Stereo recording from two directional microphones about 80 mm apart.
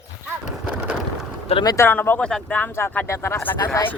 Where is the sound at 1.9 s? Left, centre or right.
Left.